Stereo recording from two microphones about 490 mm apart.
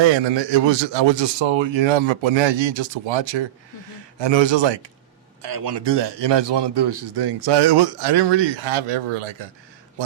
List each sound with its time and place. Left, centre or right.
0.0 s a man's voice: right
5.4 s a man's voice: right